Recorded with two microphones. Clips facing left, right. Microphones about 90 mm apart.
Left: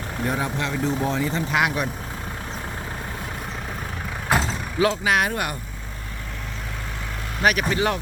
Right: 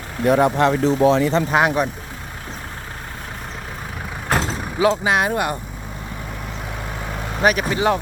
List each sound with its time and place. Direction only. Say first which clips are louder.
0.3 s speech: right 12 dB; 65° right (ahead or behind)
0.9 s speech: right 6 dB; 85° right
1.5 s speech: right 5 dB; 35° right (ahead or behind)
4.3 s vehicle: right 1 dB; centre (ahead or behind)
4.9 s speech: right 6 dB; 25° right (ahead or behind)
7.4 s speech: right 3 dB; 25° right (ahead or behind)